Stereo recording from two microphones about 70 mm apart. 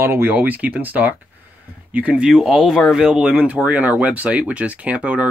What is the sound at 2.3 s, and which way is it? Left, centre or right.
Speech, centre.